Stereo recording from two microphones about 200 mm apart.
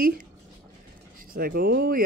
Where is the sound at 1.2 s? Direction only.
45° right (ahead or behind).